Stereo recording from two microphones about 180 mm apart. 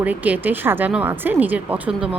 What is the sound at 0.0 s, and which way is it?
A woman's voice, 10° right (ahead or behind).